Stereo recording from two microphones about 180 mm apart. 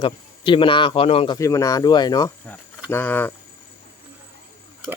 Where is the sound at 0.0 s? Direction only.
30° left (ahead or behind).